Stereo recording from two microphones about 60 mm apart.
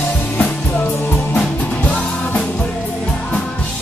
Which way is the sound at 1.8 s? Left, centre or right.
Left.